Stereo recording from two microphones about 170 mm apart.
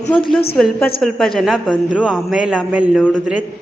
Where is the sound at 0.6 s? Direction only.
5° left (ahead or behind).